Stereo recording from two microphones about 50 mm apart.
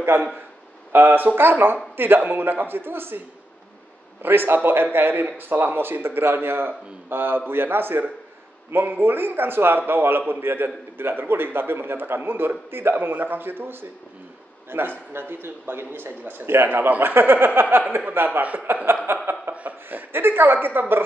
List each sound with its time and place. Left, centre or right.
0.1 s a man's voice: right
4.2 s a man's voice: right
18.7 s chuckle: right
19.9 s a man's voice: right